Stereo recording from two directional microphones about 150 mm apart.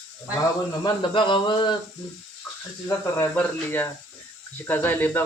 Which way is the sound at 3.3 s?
15° left (ahead or behind).